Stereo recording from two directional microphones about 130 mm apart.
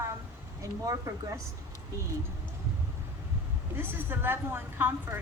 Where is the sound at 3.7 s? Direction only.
15° right (ahead or behind).